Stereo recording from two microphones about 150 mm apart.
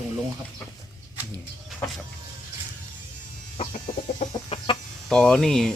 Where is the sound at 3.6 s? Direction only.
55° left (ahead or behind).